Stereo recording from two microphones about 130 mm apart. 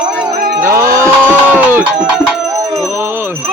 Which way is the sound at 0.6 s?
20° right (ahead or behind).